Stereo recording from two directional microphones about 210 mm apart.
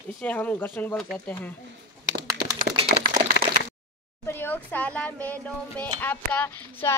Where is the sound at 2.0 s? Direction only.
15° right (ahead or behind).